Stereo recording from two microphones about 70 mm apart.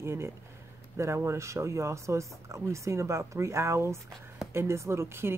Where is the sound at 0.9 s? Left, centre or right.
Right.